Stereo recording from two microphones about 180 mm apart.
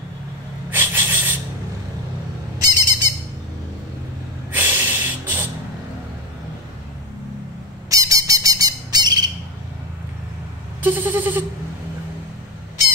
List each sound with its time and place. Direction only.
0.7 s a sound: 10° right (ahead or behind)
2.6 s squawk: 20° right (ahead or behind)
4.5 s snort: 10° right (ahead or behind)
7.9 s squawk: 20° right (ahead or behind)
10.8 s bleat: 10° right (ahead or behind)